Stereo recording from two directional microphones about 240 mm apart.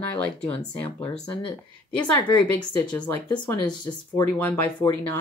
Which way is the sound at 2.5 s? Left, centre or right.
Centre.